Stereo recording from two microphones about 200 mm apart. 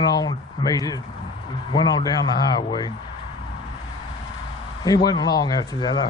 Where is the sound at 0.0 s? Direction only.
20° left (ahead or behind).